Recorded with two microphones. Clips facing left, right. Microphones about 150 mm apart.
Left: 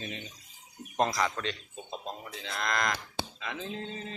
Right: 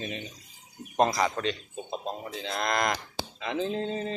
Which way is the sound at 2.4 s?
25° right (ahead or behind).